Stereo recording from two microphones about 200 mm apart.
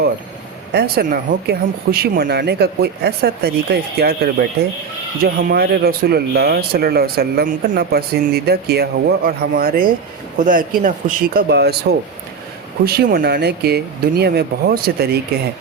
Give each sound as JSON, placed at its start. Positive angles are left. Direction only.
{"t": 0.7, "sound": "speech", "side_deg": -55}